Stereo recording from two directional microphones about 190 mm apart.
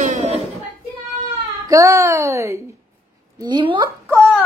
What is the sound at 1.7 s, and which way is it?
A child's voice, 15° right (ahead or behind).